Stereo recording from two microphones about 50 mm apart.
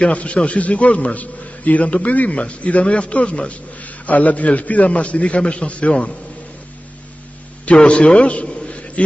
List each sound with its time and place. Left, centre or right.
0.0 s a man's voice: left
7.6 s a man's voice: left